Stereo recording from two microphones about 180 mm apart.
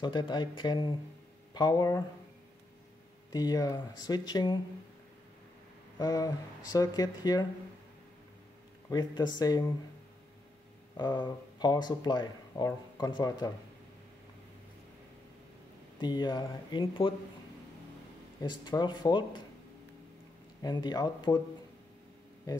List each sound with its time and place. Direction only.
0.0 s speech: 25° left (ahead or behind)
3.3 s speech: 20° left (ahead or behind)
5.9 s speech: 20° left (ahead or behind)
8.9 s speech: 25° left (ahead or behind)
11.0 s speech: 25° left (ahead or behind)
16.0 s speech: 25° left (ahead or behind)
18.4 s speech: 25° left (ahead or behind)
20.6 s speech: 25° left (ahead or behind)